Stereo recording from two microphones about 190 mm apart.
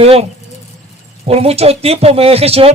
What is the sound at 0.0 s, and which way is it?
A man's voice, 30° right (ahead or behind).